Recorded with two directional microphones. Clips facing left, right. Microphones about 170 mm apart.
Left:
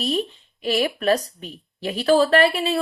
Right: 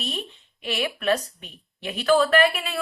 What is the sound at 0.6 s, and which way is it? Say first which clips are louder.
A woman's voice: left 5 dB; 40° left (ahead or behind).